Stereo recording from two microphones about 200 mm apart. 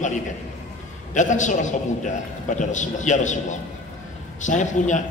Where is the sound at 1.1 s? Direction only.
40° left (ahead or behind).